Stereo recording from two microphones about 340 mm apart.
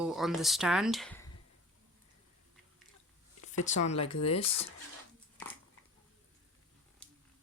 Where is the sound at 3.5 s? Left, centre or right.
Left.